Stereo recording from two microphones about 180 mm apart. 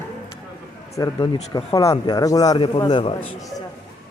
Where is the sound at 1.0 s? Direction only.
20° left (ahead or behind).